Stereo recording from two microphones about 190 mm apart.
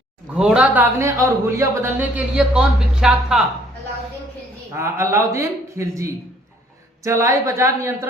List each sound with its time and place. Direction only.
0.3 s a man's voice: 5° right (ahead or behind)
4.7 s a man's voice: 15° right (ahead or behind)